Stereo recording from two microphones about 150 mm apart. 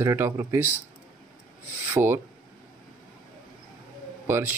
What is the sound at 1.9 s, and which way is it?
Speech, 15° right (ahead or behind).